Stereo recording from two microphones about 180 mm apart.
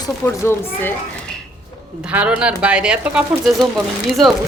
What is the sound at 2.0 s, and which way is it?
A woman's voice, 5° right (ahead or behind).